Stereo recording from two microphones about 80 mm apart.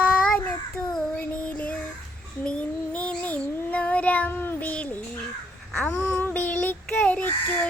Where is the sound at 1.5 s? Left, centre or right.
Centre.